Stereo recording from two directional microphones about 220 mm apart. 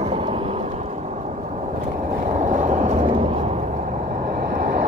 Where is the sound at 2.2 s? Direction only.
35° right (ahead or behind).